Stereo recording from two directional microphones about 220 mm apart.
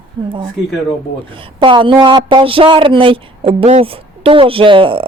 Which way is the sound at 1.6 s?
20° right (ahead or behind).